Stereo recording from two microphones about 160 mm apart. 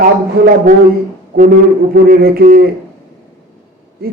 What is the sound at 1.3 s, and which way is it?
A man's voice, 65° right (ahead or behind).